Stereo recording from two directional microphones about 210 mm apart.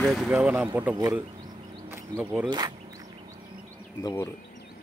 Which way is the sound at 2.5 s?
20° right (ahead or behind).